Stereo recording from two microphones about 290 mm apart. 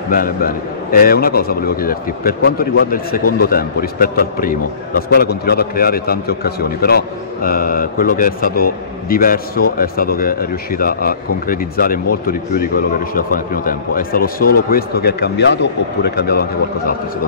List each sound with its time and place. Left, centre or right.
0.1 s a man's voice: left